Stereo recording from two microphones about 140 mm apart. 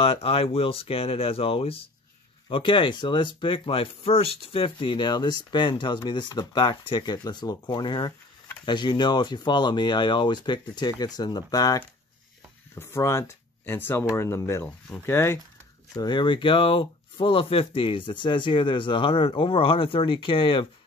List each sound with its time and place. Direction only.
0.0 s speech: 40° left (ahead or behind); by 15.3 s 15° left (ahead or behind)
15.9 s speech: 30° left (ahead or behind)